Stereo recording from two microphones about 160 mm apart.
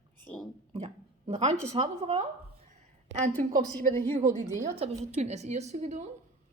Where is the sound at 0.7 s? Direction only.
40° right (ahead or behind).